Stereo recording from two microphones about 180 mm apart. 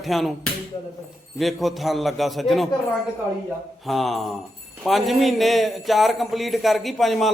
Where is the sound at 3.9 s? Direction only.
Centre (ahead or behind).